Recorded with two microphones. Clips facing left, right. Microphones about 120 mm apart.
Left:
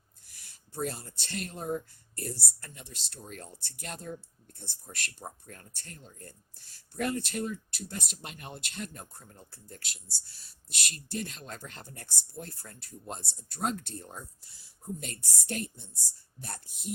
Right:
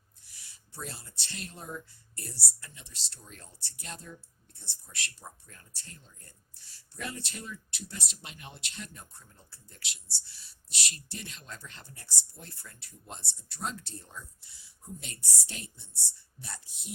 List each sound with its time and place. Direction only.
0.3 s speech: 50° left (ahead or behind)